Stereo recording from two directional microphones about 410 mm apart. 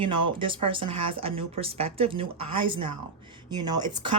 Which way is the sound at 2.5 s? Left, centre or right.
Right.